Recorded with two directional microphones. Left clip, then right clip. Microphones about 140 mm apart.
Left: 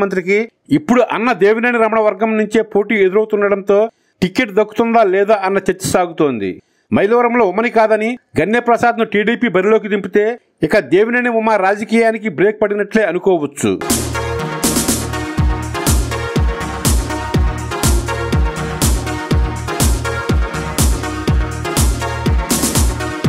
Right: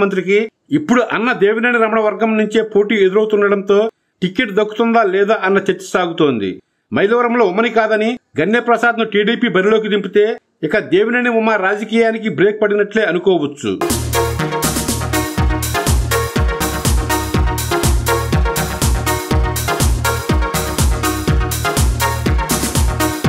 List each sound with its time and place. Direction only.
0.0 s a man's voice: 40° left (ahead or behind)
13.7 s music: centre (ahead or behind)